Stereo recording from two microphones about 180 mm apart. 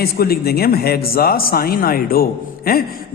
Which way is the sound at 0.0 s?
60° left (ahead or behind).